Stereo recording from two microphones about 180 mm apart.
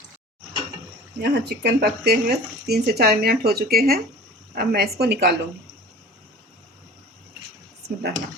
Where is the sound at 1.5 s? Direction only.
65° right (ahead or behind).